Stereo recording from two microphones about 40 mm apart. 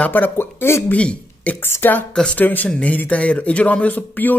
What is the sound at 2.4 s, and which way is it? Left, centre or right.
Speech, left.